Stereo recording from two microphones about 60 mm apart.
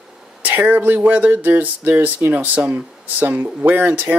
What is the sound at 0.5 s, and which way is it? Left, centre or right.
Speech, right.